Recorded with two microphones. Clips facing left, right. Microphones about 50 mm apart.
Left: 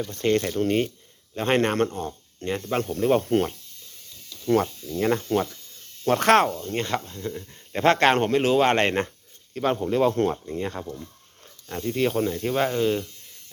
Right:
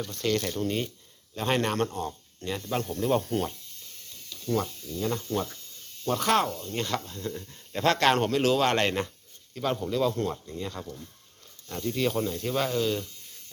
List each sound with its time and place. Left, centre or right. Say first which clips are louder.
0.2 s speech: left 6 dB; left
4.4 s speech: left 7 dB; left
6.6 s speech: left 4 dB; left
7.1 s speech: left 3 dB; centre
7.7 s speech: left 4 dB; left
11.7 s speech: left 4 dB; left